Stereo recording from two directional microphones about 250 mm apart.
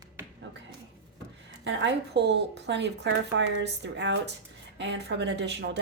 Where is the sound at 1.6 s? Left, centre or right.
Right.